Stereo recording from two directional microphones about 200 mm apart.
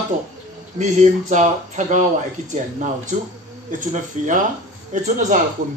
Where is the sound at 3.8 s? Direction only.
40° right (ahead or behind).